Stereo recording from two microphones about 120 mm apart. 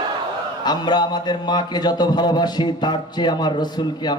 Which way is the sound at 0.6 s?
35° left (ahead or behind).